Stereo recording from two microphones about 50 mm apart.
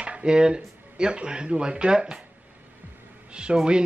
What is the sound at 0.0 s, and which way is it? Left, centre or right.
Speech, right.